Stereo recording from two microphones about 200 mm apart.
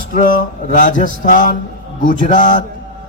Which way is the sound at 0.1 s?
45° left (ahead or behind).